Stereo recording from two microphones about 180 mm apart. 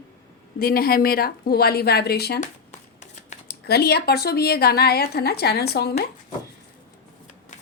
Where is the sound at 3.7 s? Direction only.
60° left (ahead or behind).